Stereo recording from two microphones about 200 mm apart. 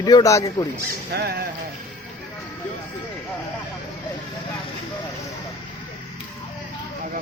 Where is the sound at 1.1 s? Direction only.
55° right (ahead or behind).